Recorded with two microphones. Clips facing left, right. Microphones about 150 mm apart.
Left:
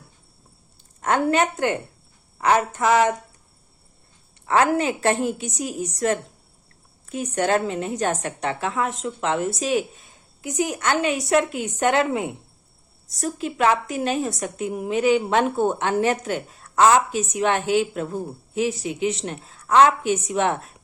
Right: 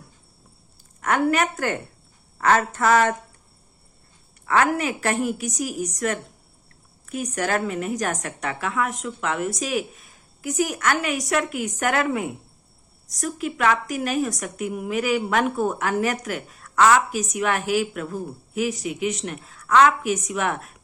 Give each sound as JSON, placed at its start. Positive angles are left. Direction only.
{"t": 1.0, "sound": "a woman's voice", "side_deg": 30}
{"t": 2.4, "sound": "a sound", "side_deg": 15}
{"t": 4.4, "sound": "a woman's voice", "side_deg": 30}